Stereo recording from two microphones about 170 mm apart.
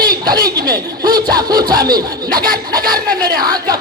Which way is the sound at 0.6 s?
60° right (ahead or behind).